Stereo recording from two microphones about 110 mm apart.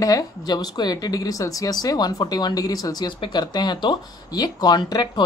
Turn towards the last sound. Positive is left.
turn(degrees=40)  # may be behind; listen again after turning